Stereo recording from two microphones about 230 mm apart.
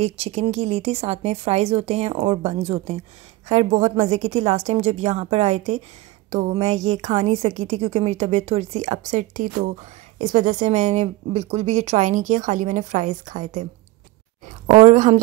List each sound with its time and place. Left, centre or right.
0.0 s a woman's voice: right
14.7 s a woman's voice: right